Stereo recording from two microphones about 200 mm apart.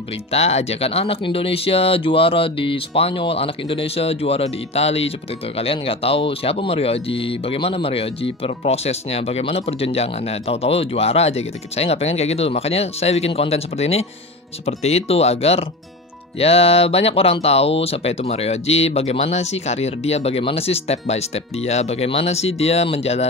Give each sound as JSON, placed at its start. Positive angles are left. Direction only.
{"t": 0.3, "sound": "speech", "side_deg": 30}